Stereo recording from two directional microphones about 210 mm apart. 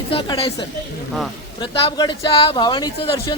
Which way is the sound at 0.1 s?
25° left (ahead or behind).